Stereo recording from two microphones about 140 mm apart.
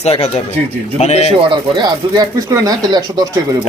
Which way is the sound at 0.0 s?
50° left (ahead or behind).